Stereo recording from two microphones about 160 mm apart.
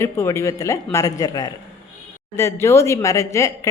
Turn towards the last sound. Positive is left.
turn(degrees=20)  # may be behind; listen again after turning